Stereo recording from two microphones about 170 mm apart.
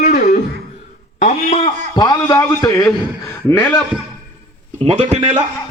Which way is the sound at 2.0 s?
25° left (ahead or behind).